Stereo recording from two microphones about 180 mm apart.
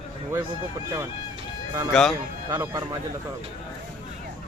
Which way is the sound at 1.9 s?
Centre (ahead or behind).